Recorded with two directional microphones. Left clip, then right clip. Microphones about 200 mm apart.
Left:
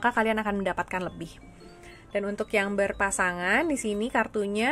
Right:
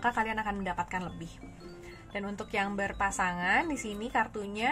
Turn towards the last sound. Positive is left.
turn(degrees=50)  # may be behind; listen again after turning